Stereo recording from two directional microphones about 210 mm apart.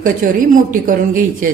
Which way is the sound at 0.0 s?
40° right (ahead or behind).